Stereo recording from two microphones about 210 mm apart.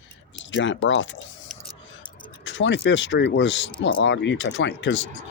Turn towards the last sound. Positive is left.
turn(degrees=65)  # may be behind; listen again after turning